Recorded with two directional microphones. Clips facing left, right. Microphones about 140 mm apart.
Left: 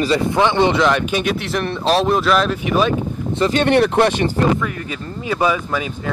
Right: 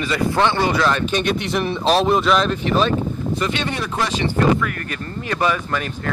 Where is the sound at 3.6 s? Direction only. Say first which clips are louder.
Left 10 dB; 65° left (ahead or behind).